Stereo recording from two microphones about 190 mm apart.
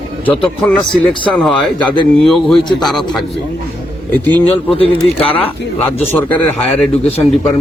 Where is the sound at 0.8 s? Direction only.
25° left (ahead or behind).